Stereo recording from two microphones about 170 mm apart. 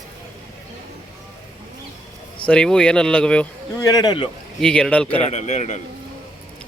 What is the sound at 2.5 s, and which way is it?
Speech, 5° left (ahead or behind).